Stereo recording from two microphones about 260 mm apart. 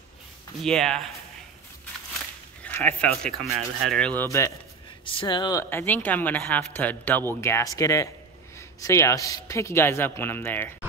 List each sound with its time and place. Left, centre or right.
0.6 s speech: centre
2.6 s speech: centre